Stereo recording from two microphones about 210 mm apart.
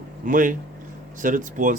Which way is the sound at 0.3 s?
40° right (ahead or behind).